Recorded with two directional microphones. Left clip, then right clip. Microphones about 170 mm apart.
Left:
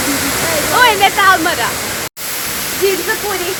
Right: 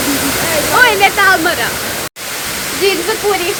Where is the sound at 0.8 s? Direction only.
20° right (ahead or behind).